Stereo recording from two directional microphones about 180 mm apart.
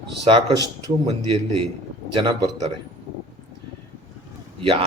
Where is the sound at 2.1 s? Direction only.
25° right (ahead or behind).